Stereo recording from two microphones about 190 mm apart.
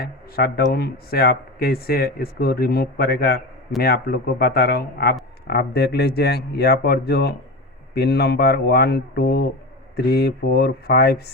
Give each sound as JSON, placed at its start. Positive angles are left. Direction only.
{"t": 0.0, "sound": "speech", "side_deg": 55}